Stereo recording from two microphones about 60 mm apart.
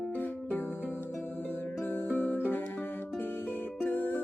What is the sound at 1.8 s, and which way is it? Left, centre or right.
Music, left.